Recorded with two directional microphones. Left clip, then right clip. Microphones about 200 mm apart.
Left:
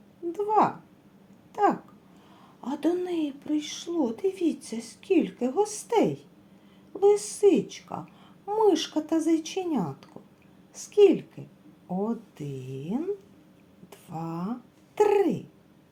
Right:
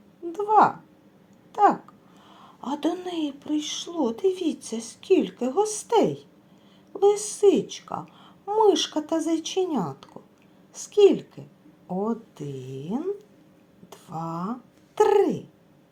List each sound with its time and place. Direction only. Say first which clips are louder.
0.3 s a woman's voice: right 5 dB; centre (ahead or behind)
1.5 s babbling: right 5 dB; centre (ahead or behind)
2.4 s a woman's voice: right 1 dB; centre (ahead or behind)